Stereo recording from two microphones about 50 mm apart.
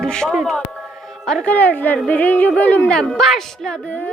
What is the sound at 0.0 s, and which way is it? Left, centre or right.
Speech, centre.